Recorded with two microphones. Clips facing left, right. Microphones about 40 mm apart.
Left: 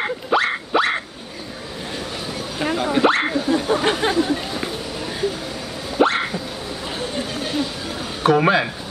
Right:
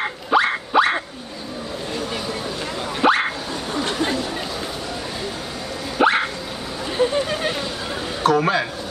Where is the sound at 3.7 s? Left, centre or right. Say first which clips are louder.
Even; left.